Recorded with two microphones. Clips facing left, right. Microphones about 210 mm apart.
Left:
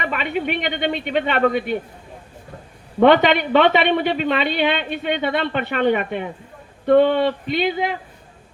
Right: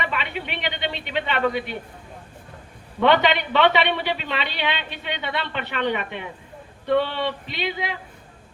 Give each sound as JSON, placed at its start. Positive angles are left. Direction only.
{"t": 0.0, "sound": "a woman's voice", "side_deg": 50}
{"t": 3.0, "sound": "a woman's voice", "side_deg": 50}